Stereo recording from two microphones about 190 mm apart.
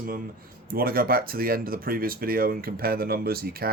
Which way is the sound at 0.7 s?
50° right (ahead or behind).